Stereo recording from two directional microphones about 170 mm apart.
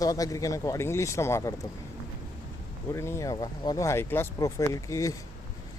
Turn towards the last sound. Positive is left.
turn(degrees=20)  # may be behind; listen again after turning